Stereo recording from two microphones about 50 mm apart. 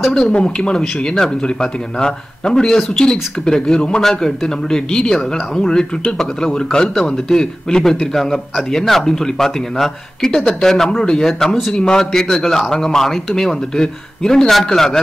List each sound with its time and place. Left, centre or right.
0.1 s a man's voice: centre